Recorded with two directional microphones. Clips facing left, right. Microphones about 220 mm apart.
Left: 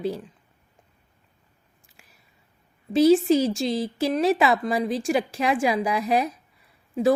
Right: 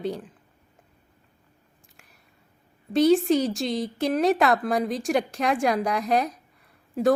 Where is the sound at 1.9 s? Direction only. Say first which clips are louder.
Even; centre (ahead or behind).